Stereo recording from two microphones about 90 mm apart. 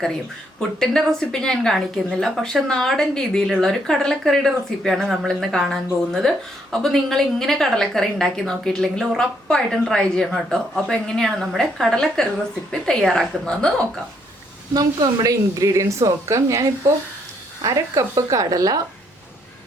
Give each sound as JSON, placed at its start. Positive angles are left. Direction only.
{"t": 0.8, "sound": "a woman's voice", "side_deg": 5}
{"t": 14.7, "sound": "speech", "side_deg": -50}